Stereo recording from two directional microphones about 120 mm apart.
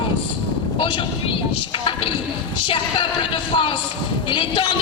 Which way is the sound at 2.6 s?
40° left (ahead or behind).